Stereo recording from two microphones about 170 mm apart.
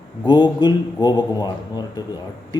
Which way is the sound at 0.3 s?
25° left (ahead or behind).